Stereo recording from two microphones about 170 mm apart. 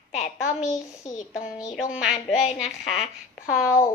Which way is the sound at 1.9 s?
Centre (ahead or behind).